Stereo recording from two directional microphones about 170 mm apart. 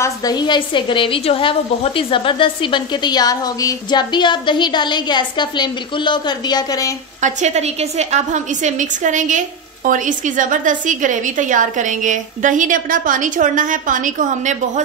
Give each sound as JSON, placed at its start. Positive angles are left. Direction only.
{"t": 0.0, "sound": "a woman's voice", "side_deg": 20}
{"t": 7.2, "sound": "a woman's voice", "side_deg": -45}